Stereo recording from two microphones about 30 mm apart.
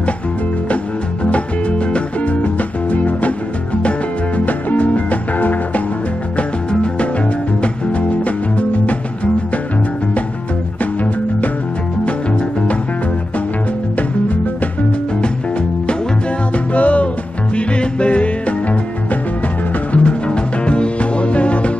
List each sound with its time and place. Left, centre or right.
1.9 s music: left
2.4 s music: left
4.5 s music: left
6.7 s music: left
7.6 s music: left
16.5 s music: left
17.6 s music: left
19.9 s music: left
20.2 s music: left